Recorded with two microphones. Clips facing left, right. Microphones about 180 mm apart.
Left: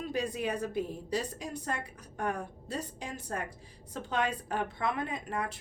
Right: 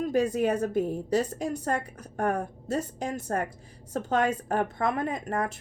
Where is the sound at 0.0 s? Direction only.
45° right (ahead or behind).